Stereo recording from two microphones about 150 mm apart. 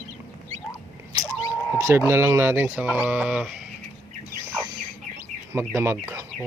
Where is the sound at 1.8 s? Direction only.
20° right (ahead or behind).